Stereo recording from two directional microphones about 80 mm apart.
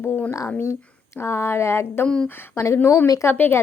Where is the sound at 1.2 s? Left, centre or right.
Left.